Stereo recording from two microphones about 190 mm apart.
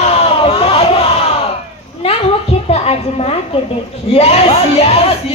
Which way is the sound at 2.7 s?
30° left (ahead or behind).